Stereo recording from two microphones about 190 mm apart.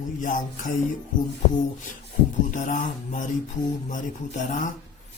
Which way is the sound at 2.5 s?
40° left (ahead or behind).